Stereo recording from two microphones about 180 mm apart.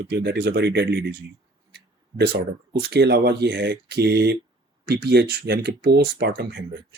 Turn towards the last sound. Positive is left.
turn(degrees=-65)  # may be behind; listen again after turning